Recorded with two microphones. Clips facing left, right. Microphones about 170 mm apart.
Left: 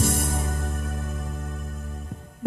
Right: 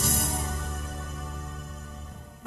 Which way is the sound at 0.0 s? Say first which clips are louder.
Left 5 dB; 50° left (ahead or behind).